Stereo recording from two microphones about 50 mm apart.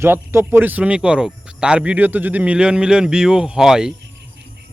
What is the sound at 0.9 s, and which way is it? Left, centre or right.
Speech, centre.